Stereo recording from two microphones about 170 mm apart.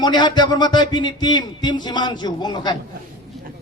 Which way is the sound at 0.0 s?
25° left (ahead or behind).